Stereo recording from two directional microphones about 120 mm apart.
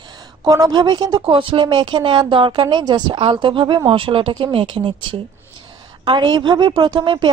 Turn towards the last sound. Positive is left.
turn(degrees=-40)  # may be behind; listen again after turning